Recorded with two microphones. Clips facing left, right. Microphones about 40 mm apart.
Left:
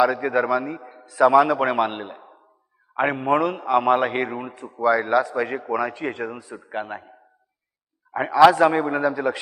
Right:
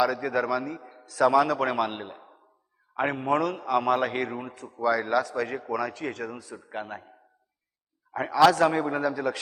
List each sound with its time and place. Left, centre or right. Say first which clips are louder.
0.0 s a man's voice: left 5 dB; left